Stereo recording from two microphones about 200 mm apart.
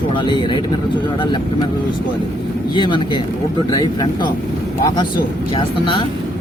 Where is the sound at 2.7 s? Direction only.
25° left (ahead or behind).